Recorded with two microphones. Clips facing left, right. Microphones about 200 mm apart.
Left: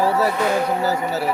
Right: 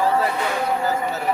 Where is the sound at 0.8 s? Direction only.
40° left (ahead or behind).